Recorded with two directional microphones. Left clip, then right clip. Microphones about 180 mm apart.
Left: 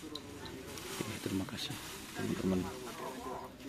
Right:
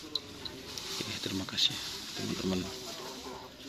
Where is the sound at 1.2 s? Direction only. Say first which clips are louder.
Right 12 dB; 5° left (ahead or behind).